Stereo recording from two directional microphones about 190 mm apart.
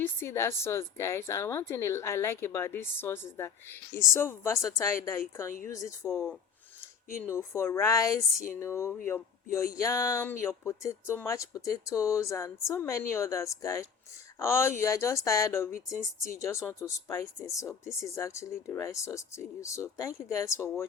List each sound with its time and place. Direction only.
0.0 s a woman's voice: 15° left (ahead or behind)
7.3 s a woman's voice: 15° left (ahead or behind)